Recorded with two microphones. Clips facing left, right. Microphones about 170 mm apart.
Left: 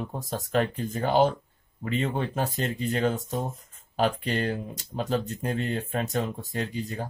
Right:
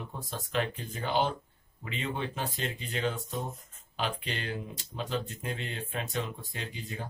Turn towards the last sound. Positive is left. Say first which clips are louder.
# left 9 dB
turn(degrees=45)  # may be behind; listen again after turning